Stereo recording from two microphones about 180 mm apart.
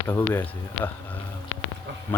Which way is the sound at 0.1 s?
10° left (ahead or behind).